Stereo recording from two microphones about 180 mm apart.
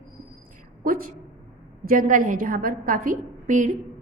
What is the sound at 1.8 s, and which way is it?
A woman's voice, 50° right (ahead or behind).